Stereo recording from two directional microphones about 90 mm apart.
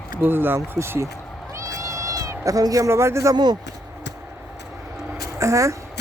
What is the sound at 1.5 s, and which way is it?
Cat, 35° right (ahead or behind).